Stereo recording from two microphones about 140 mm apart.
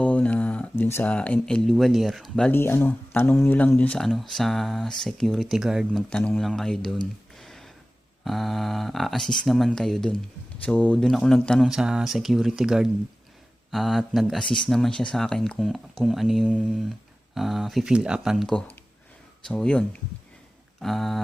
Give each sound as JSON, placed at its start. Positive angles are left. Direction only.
{"t": 0.0, "sound": "speech", "side_deg": 10}
{"t": 2.5, "sound": "speech", "side_deg": 15}
{"t": 7.3, "sound": "a sound", "side_deg": 0}
{"t": 8.2, "sound": "speech", "side_deg": 0}
{"t": 11.7, "sound": "speech", "side_deg": -5}
{"t": 14.4, "sound": "speech", "side_deg": 35}
{"t": 14.7, "sound": "speech", "side_deg": 5}